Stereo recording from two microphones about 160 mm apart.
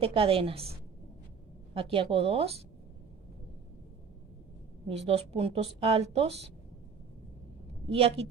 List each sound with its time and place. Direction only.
0.0 s a woman's voice: 35° right (ahead or behind)
4.8 s a woman's voice: 40° right (ahead or behind)
7.9 s a woman's voice: 35° right (ahead or behind)